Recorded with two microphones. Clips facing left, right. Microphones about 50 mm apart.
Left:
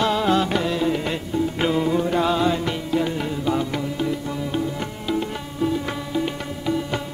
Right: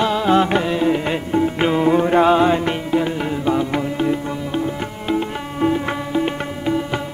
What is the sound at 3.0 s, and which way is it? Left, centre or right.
Music, centre.